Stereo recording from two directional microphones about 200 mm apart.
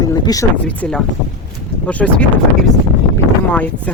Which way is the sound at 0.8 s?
5° left (ahead or behind).